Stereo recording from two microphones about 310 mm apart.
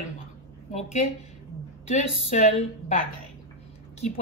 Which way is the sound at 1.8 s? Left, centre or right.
Left.